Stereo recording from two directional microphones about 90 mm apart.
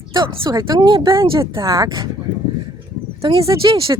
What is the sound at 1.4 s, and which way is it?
Speech, 40° right (ahead or behind).